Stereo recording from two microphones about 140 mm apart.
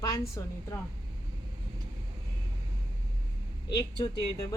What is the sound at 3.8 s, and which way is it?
Speech, 30° left (ahead or behind).